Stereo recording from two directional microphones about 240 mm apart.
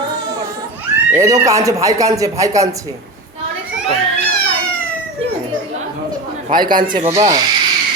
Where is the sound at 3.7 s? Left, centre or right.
Centre.